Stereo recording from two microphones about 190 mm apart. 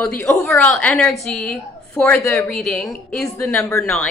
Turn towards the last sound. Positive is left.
turn(degrees=5)  # may be behind; listen again after turning